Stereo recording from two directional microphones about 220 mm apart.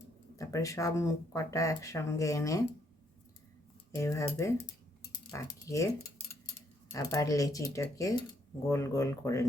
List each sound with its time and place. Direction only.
0.3 s speech: 15° left (ahead or behind)
3.9 s speech: 10° left (ahead or behind)